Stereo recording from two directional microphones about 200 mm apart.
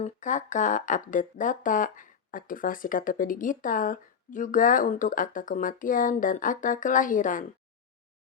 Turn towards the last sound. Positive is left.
turn(degrees=40)  # may be behind; listen again after turning